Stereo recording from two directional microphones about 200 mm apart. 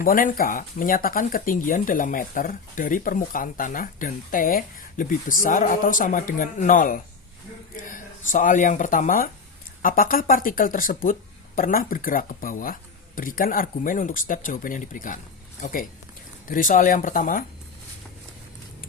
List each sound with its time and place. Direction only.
0.0 s speech: 45° left (ahead or behind)